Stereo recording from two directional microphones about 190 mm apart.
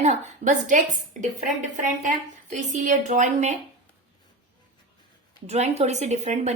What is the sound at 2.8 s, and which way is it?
Speech, 40° right (ahead or behind).